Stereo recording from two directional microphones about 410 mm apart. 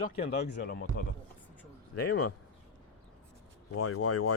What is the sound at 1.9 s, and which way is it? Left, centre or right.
Speech, left.